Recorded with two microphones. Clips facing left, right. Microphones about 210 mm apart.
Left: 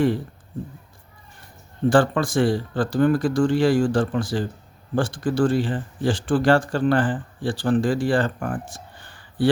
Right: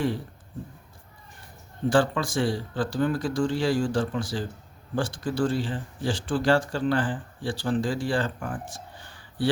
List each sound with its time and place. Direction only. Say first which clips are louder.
1.9 s speech: left 4 dB; 55° left (ahead or behind)